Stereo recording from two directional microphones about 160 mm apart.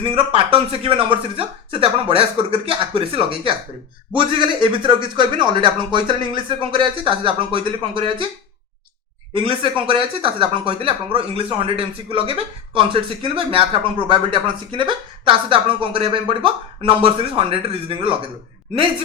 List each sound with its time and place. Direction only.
0.0 s speech: 35° right (ahead or behind)
9.3 s speech: 30° right (ahead or behind)